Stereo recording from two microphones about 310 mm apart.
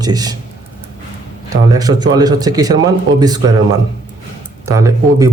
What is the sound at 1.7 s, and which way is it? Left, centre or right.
Speech, centre.